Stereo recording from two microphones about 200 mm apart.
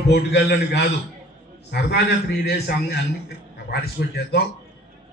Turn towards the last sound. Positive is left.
turn(degrees=50)  # may be behind; listen again after turning